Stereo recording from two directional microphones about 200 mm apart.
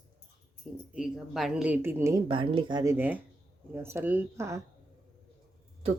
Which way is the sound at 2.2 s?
25° right (ahead or behind).